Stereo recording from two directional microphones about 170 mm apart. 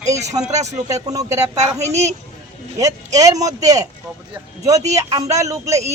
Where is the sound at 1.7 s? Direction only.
40° right (ahead or behind).